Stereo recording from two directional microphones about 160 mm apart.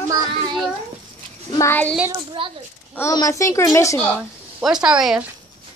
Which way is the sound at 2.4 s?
35° right (ahead or behind).